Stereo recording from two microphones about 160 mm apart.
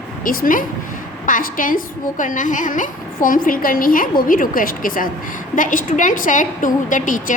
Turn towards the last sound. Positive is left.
turn(degrees=55)  # may be behind; listen again after turning